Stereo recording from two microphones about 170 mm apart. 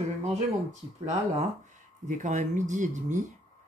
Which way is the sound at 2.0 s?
45° right (ahead or behind).